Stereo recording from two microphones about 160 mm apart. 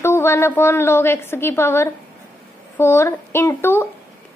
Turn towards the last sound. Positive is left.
turn(degrees=15)  # may be behind; listen again after turning